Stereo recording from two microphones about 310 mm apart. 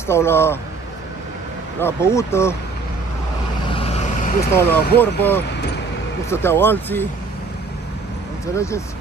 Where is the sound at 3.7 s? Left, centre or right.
Centre.